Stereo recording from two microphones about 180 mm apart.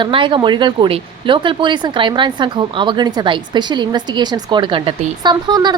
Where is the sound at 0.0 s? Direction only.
25° right (ahead or behind).